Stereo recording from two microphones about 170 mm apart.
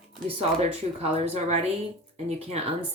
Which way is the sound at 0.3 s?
35° right (ahead or behind).